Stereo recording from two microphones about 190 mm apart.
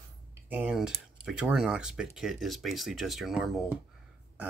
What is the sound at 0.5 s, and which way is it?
Speech, 5° right (ahead or behind).